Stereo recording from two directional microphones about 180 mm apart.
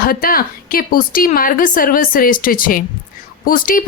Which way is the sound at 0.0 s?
55° left (ahead or behind).